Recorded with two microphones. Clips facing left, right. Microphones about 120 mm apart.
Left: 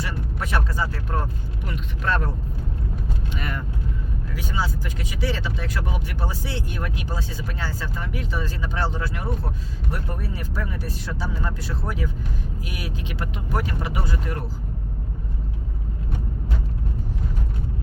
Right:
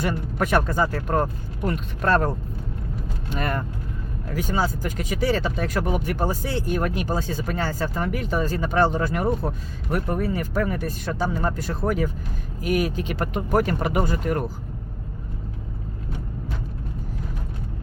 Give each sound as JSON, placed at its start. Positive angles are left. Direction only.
{"t": 0.0, "sound": "speech", "side_deg": -55}
{"t": 3.3, "sound": "speech", "side_deg": -45}